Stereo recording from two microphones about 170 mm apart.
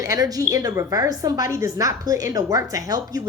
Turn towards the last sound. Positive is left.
turn(degrees=-20)  # may be behind; listen again after turning